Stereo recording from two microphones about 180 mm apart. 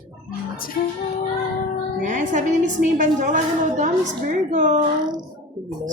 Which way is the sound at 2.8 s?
45° right (ahead or behind).